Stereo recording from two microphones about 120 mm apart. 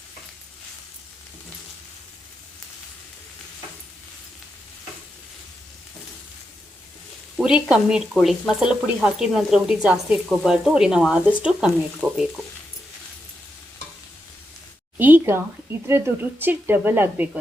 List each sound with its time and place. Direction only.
7.3 s a woman's voice: 5° right (ahead or behind)
14.9 s a woman's voice: 15° right (ahead or behind)